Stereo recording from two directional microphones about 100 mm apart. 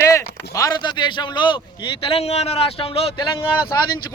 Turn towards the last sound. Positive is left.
turn(degrees=40)  # may be behind; listen again after turning